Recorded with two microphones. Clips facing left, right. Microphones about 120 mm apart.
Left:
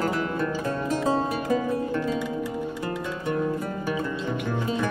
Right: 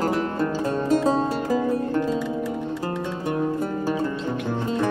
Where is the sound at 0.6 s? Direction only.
25° right (ahead or behind).